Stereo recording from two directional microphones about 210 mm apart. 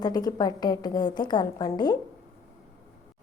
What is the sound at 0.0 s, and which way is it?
A woman's voice, 20° left (ahead or behind).